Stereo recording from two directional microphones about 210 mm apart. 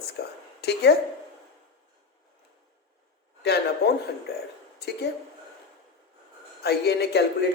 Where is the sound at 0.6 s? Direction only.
50° left (ahead or behind).